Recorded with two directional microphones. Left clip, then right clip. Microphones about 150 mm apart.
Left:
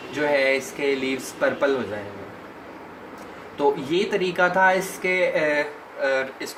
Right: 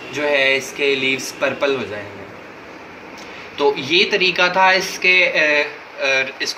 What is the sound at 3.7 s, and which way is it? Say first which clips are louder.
Speech: right 7 dB; 45° left (ahead or behind).